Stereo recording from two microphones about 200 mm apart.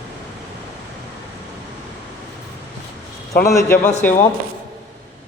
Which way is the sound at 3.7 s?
40° left (ahead or behind).